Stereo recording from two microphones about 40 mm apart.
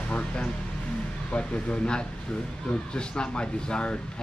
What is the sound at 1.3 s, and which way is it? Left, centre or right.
Speech, left.